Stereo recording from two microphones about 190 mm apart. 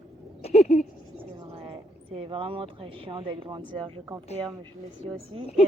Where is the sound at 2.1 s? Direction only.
30° right (ahead or behind).